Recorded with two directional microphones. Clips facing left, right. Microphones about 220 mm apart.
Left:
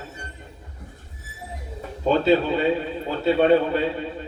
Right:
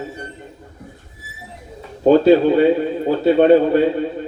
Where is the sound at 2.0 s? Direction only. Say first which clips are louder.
Right 8 dB; 50° right (ahead or behind).